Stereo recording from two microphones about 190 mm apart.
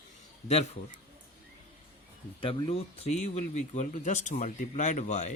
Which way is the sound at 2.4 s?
30° left (ahead or behind).